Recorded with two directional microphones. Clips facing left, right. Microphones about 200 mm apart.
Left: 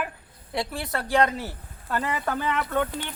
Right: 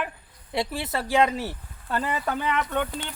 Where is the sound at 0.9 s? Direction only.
5° right (ahead or behind).